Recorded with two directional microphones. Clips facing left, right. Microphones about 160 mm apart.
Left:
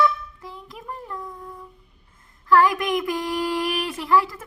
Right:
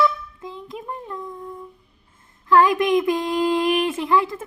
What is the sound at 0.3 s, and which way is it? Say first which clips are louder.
Child singing: right 5 dB; 20° right (ahead or behind).